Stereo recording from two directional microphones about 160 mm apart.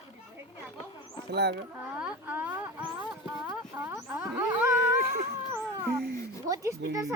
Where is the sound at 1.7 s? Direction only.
10° right (ahead or behind).